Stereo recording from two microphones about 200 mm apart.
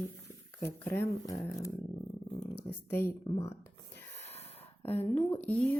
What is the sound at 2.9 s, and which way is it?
Speech, 10° left (ahead or behind).